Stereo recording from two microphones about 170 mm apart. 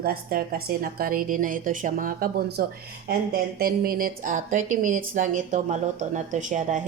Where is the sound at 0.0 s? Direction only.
60° right (ahead or behind).